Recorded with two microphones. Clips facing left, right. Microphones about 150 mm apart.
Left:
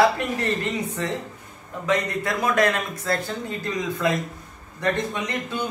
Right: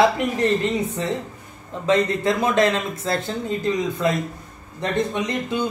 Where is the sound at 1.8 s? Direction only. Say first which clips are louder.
Right 5 dB; 25° right (ahead or behind).